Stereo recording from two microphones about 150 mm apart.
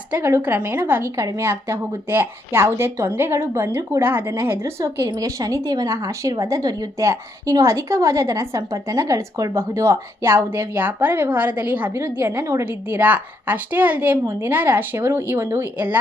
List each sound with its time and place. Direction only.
0.1 s a woman's voice: 15° right (ahead or behind)